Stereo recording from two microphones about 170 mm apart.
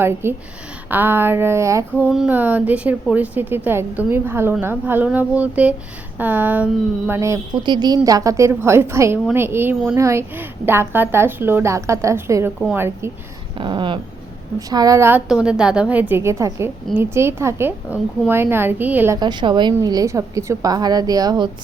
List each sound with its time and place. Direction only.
0.0 s a woman's voice: 15° right (ahead or behind)
2.0 s a woman's voice: 5° right (ahead or behind)
13.6 s a woman's voice: 30° right (ahead or behind)
15.3 s a woman's voice: 5° right (ahead or behind)
19.2 s a woman's voice: 25° right (ahead or behind)